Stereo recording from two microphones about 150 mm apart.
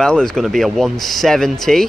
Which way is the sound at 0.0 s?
5° left (ahead or behind).